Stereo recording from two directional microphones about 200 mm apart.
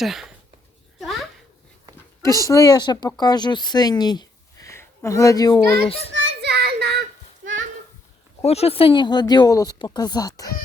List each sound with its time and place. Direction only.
0.0 s speech: centre (ahead or behind)
0.9 s a sound: centre (ahead or behind)
2.2 s speech: 15° left (ahead or behind)
6.1 s child singing: 60° right (ahead or behind)
8.4 s speech: 30° left (ahead or behind)